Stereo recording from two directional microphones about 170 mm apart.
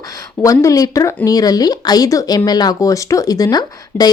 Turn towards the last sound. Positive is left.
turn(degrees=25)  # may be behind; listen again after turning